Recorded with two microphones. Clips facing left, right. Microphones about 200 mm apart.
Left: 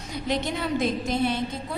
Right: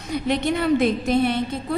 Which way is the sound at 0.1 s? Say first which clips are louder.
Right 6 dB; 60° right (ahead or behind).